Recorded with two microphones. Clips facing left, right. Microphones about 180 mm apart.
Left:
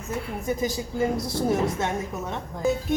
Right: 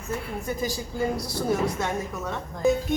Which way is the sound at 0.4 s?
20° left (ahead or behind).